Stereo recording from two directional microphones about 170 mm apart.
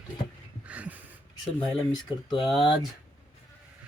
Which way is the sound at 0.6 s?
10° right (ahead or behind).